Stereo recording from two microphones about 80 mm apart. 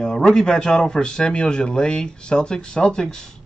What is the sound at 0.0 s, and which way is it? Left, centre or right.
A man's voice, centre.